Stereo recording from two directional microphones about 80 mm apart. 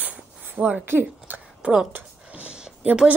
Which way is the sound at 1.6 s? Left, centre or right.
Centre.